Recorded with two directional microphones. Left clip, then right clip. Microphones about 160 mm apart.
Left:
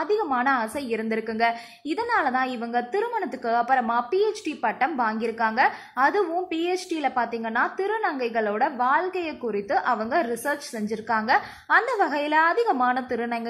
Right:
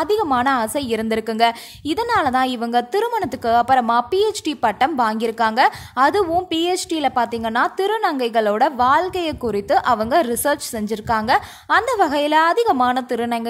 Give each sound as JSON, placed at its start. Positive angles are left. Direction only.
{"t": 0.0, "sound": "a woman's voice", "side_deg": -35}